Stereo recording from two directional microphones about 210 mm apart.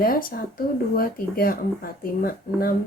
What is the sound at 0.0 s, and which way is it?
Speech, 45° left (ahead or behind).